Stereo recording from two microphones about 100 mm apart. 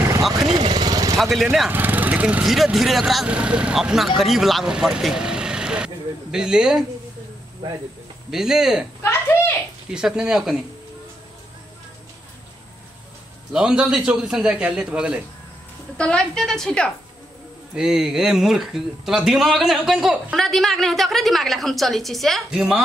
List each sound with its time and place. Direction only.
0.6 s vehicle: 50° right (ahead or behind)
1.1 s speech: centre (ahead or behind)
1.7 s lawn mower: 20° right (ahead or behind)
2.4 s speech: 5° right (ahead or behind)
8.3 s speech: 5° right (ahead or behind)
9.9 s speech: 5° right (ahead or behind)
13.5 s speech: 10° right (ahead or behind)
16.0 s a woman's voice: 10° left (ahead or behind)
17.7 s speech: 5° right (ahead or behind)